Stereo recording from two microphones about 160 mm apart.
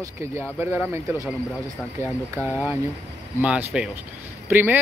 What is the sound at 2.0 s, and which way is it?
Speech, 15° right (ahead or behind).